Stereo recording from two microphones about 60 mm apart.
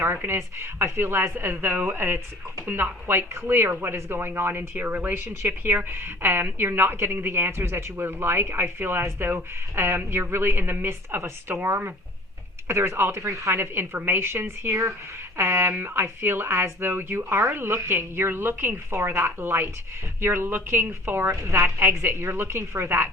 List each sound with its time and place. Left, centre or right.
0.0 s a woman's voice: right
9.8 s a woman's voice: right
13.6 s a woman's voice: right
15.7 s a woman's voice: right